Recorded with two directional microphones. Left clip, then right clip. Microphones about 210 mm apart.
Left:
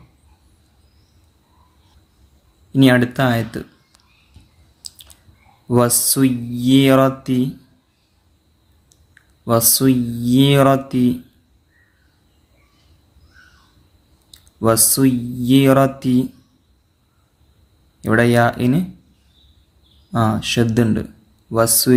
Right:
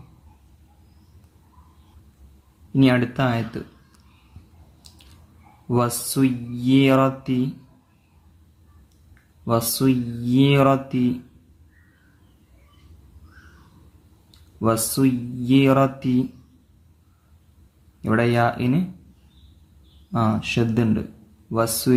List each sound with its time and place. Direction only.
2.7 s speech: 15° left (ahead or behind)
5.6 s speech: 15° left (ahead or behind)
9.4 s speech: 15° left (ahead or behind)
14.3 s speech: 15° left (ahead or behind)
18.0 s speech: 15° left (ahead or behind)
20.1 s speech: 15° left (ahead or behind)